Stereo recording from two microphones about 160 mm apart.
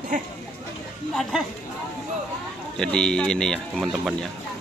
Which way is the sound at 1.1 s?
Centre (ahead or behind).